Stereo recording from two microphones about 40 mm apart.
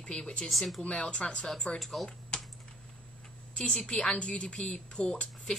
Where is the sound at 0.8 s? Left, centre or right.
Left.